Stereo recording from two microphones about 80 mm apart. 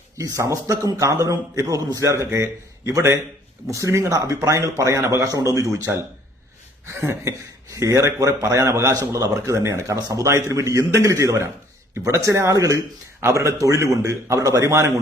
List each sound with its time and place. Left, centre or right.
0.2 s a man's voice: right